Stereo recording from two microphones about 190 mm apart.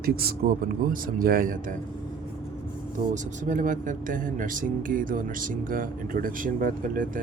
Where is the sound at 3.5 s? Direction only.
45° right (ahead or behind).